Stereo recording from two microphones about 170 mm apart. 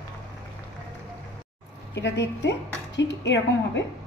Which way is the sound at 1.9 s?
90° left.